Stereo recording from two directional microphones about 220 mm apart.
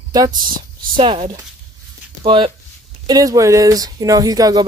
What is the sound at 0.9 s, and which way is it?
Speech, 25° right (ahead or behind).